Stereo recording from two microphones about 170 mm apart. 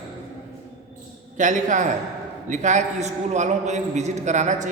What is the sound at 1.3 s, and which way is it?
A man's voice, 50° right (ahead or behind).